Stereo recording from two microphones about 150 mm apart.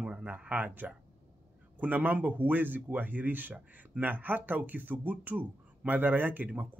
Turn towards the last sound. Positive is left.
turn(degrees=-10)  # may be behind; listen again after turning